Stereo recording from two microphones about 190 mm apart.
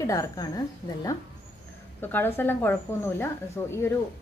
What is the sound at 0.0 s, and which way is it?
Speech, 15° left (ahead or behind).